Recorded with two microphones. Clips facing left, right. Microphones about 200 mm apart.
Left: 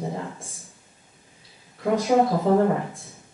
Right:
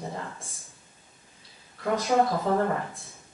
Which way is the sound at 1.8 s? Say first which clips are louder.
Left 4 dB; 10° left (ahead or behind).